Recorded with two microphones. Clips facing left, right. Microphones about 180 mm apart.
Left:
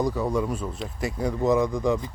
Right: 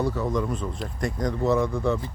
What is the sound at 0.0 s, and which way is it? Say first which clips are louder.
Speech: left 1 dB; 10° left (ahead or behind).